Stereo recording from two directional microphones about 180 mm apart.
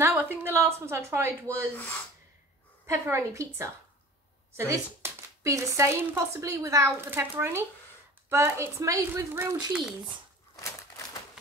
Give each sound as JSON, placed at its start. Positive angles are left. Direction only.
{"t": 0.0, "sound": "a woman's voice", "side_deg": -10}
{"t": 2.9, "sound": "a woman's voice", "side_deg": -15}